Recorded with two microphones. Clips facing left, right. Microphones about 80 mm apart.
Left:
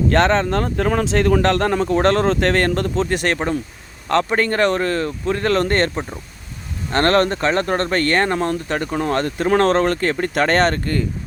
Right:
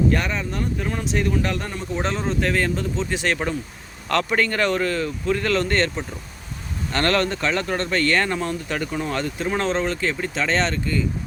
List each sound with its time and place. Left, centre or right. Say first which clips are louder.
0.1 s speech: left 8 dB; left
4.1 s speech: left 4 dB; left